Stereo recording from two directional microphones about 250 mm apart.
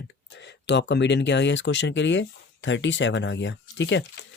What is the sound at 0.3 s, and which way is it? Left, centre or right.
Speech, left.